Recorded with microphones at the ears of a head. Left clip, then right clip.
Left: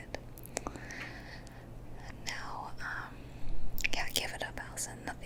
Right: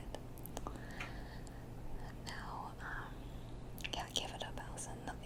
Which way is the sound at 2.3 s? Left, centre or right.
Left.